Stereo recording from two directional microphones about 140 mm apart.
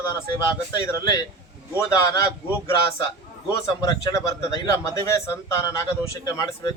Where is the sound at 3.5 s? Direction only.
25° left (ahead or behind).